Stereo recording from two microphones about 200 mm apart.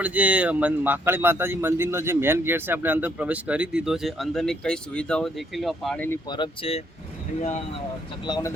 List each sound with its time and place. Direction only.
0.0 s a man's voice: 5° right (ahead or behind)
6.2 s speech: 25° left (ahead or behind)
8.2 s speech: 20° left (ahead or behind)